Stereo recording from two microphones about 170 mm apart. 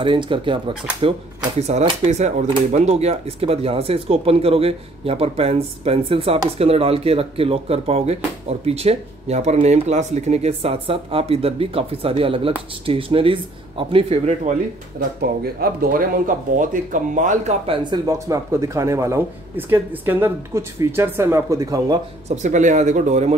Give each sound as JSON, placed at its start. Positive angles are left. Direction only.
{"t": 0.0, "sound": "speech", "side_deg": -30}
{"t": 1.7, "sound": "speech", "side_deg": -40}
{"t": 15.1, "sound": "speech", "side_deg": -65}
{"t": 17.6, "sound": "speech", "side_deg": -25}
{"t": 22.3, "sound": "speech", "side_deg": -45}